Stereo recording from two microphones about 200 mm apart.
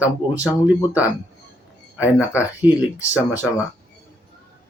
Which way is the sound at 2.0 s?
5° right (ahead or behind).